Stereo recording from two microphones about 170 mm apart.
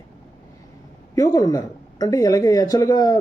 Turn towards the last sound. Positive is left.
turn(degrees=20)  # may be behind; listen again after turning